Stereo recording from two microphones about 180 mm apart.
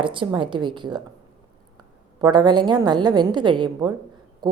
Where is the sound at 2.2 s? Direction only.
25° right (ahead or behind).